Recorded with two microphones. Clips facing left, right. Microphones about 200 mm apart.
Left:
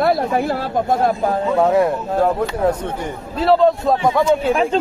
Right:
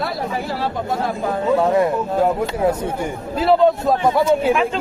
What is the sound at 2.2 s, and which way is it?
Speech, 10° right (ahead or behind).